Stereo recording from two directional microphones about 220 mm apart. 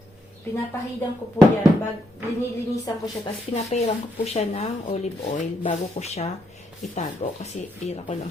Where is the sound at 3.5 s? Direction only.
30° left (ahead or behind).